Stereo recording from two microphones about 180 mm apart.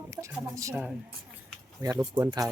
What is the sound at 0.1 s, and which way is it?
Speech, 15° right (ahead or behind).